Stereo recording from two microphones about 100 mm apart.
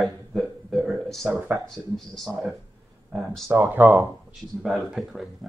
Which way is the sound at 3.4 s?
20° right (ahead or behind).